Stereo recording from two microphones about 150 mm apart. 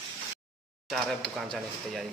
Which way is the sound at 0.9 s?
5° left (ahead or behind).